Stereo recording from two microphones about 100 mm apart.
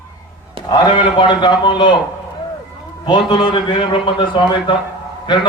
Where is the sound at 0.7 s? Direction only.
50° left (ahead or behind).